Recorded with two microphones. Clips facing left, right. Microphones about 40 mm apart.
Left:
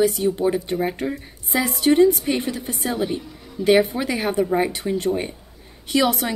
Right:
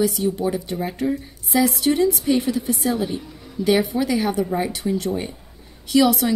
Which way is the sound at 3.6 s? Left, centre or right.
Left.